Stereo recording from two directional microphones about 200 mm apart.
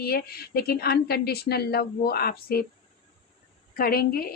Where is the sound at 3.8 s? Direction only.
50° left (ahead or behind).